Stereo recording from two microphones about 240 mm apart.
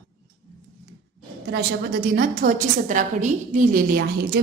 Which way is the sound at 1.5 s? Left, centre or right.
Right.